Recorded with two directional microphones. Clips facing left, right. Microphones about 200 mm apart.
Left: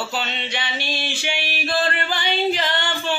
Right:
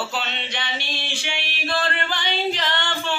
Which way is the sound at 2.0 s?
5° left (ahead or behind).